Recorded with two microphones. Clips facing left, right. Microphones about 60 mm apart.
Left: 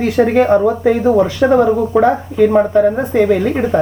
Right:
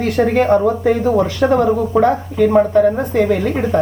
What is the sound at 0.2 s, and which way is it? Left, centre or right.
Speech, left.